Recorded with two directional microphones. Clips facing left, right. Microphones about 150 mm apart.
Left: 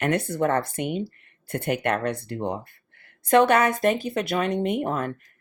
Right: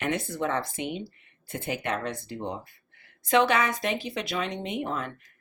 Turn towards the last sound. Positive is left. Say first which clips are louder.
# left 6 dB
turn(degrees=50)  # may be behind; listen again after turning